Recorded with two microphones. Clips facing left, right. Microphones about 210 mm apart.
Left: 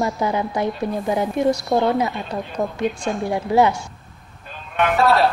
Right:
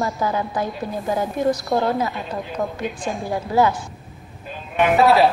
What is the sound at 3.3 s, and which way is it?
Speech, 20° left (ahead or behind).